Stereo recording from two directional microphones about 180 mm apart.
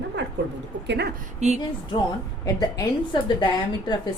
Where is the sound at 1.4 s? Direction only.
40° right (ahead or behind).